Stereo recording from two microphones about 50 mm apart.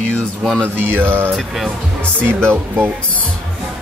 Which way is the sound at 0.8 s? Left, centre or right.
Right.